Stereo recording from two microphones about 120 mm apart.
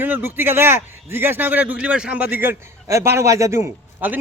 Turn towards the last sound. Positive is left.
turn(degrees=-20)  # may be behind; listen again after turning